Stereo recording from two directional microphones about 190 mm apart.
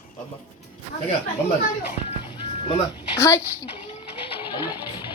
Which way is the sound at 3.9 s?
25° left (ahead or behind).